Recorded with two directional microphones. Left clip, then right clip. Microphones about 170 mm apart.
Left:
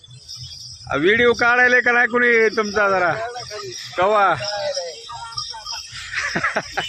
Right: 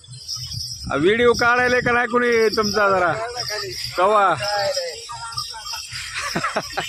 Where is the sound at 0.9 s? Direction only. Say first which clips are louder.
Left 1 dB; centre (ahead or behind).